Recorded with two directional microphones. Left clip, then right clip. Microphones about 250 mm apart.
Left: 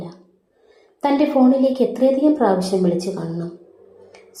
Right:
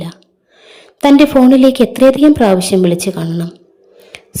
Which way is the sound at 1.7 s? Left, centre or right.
Right.